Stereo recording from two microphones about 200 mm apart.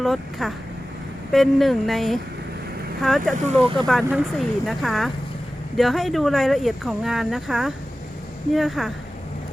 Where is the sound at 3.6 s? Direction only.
25° right (ahead or behind).